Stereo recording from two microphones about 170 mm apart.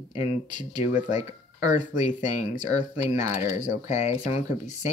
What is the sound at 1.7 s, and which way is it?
Speech, 45° left (ahead or behind).